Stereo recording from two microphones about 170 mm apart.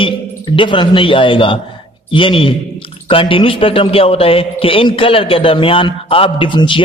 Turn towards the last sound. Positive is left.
turn(degrees=30)  # may be behind; listen again after turning